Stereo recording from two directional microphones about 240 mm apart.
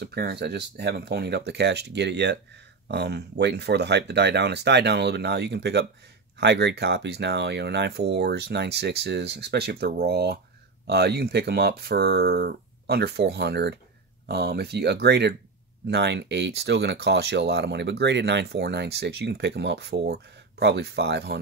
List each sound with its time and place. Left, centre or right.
0.0 s speech: right